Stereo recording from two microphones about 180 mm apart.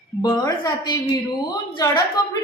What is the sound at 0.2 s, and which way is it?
A woman's voice, 20° left (ahead or behind).